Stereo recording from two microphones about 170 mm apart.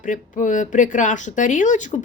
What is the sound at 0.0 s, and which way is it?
Speech, 50° left (ahead or behind).